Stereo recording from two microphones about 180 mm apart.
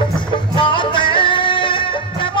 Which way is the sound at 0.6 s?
25° left (ahead or behind).